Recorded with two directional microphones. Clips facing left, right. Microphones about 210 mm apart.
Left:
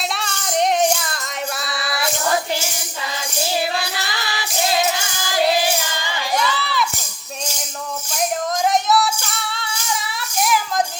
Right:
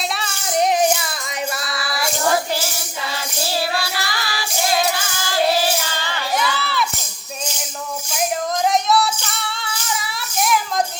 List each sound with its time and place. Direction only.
0.1 s music: 5° right (ahead or behind)
3.4 s music: 20° left (ahead or behind)
5.3 s child singing: 15° left (ahead or behind)
6.3 s a sound: centre (ahead or behind)
8.7 s music: centre (ahead or behind)
10.4 s a sound: centre (ahead or behind)